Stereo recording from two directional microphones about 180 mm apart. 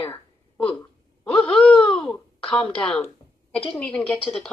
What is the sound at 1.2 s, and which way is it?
A woman's voice, 5° left (ahead or behind).